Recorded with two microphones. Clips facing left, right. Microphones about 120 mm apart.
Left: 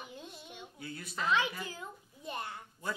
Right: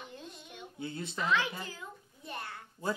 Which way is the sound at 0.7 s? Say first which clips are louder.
Right 7 dB; 25° right (ahead or behind).